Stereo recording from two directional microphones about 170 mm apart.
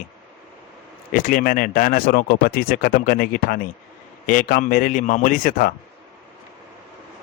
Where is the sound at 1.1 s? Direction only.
50° left (ahead or behind).